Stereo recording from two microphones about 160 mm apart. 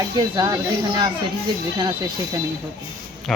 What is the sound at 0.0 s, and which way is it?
Speech, 25° right (ahead or behind).